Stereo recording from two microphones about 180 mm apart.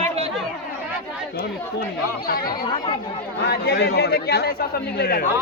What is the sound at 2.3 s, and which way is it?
Speech, 55° left (ahead or behind).